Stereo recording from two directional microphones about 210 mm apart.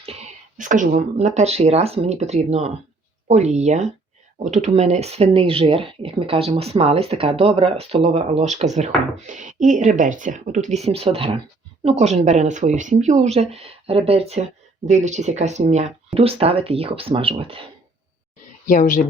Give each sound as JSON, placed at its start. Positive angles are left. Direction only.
{"t": 0.0, "sound": "speech", "side_deg": -30}
{"t": 18.6, "sound": "speech", "side_deg": 40}